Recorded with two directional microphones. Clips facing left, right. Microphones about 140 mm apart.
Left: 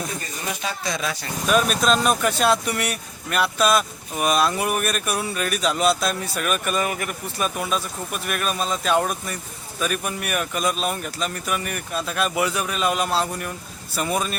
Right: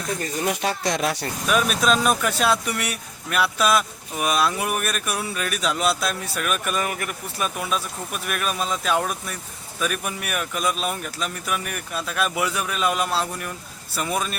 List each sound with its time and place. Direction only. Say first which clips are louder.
0.4 s speech: right 4 dB; 70° right (ahead or behind)
1.5 s speech: left 1 dB; 5° right (ahead or behind)